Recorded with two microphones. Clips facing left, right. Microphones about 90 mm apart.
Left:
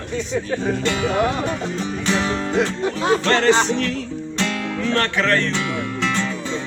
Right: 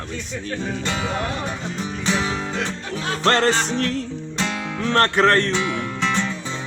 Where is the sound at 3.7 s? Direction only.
40° right (ahead or behind).